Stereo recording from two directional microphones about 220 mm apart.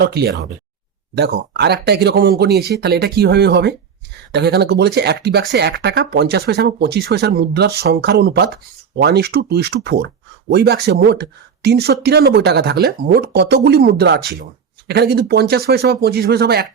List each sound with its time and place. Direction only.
0.0 s speech: 45° right (ahead or behind)